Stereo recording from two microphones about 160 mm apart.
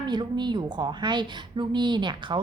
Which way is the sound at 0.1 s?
30° right (ahead or behind).